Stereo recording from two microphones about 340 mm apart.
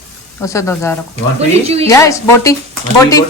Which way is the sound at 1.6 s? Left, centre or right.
Centre.